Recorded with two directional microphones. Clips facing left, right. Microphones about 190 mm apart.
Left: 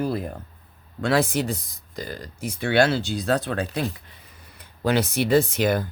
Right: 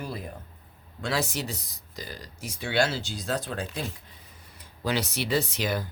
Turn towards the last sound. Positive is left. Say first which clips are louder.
# left 8 dB
turn(degrees=55)  # may be behind; listen again after turning